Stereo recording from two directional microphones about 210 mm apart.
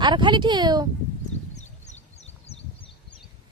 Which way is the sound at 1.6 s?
35° left (ahead or behind).